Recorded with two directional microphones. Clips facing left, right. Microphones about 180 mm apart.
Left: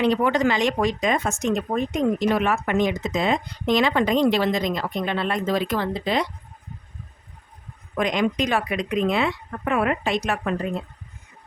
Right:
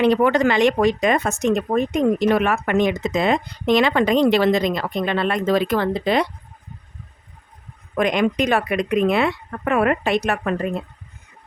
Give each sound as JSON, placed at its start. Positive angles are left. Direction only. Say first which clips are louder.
{"t": 0.0, "sound": "speech", "louder": "right 4 dB", "side_deg": -65}
{"t": 7.9, "sound": "speech", "louder": "right 3 dB", "side_deg": -60}